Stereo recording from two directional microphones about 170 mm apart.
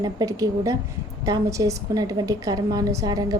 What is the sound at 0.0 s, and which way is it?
A woman's voice, 20° right (ahead or behind).